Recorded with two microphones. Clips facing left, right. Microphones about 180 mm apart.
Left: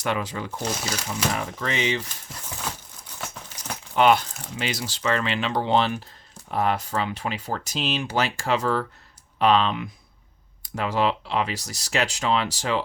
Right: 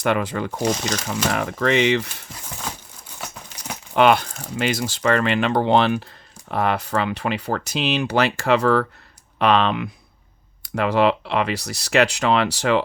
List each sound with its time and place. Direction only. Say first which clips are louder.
0.0 s speech: right 6 dB; 60° right (ahead or behind)
1.3 s speech: right 8 dB; 70° right (ahead or behind)
2.6 s crumpling: right 1 dB; 10° right (ahead or behind)
3.2 s patter: right 1 dB; 5° right (ahead or behind)
3.9 s speech: right 3 dB; 65° right (ahead or behind)